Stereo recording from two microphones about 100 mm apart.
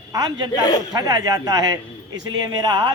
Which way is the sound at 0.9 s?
40° right (ahead or behind).